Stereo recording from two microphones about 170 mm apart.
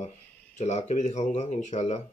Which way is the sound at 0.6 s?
40° left (ahead or behind).